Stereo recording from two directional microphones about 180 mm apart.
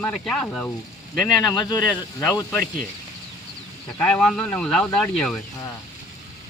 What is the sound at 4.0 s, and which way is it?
Speech, 5° left (ahead or behind).